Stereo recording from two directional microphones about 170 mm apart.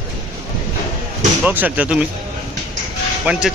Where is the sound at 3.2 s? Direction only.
5° right (ahead or behind).